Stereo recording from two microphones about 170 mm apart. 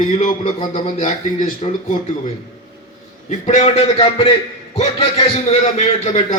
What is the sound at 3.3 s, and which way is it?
A man's voice, 45° left (ahead or behind).